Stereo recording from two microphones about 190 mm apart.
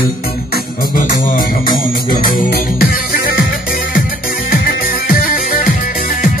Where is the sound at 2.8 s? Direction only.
50° left (ahead or behind).